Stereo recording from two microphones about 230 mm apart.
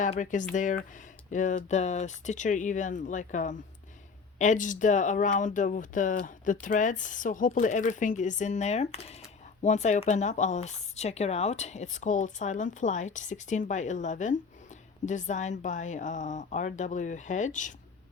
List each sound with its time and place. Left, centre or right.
0.0 s speech: left